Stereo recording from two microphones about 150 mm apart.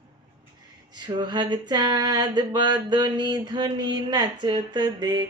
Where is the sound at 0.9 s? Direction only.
30° right (ahead or behind).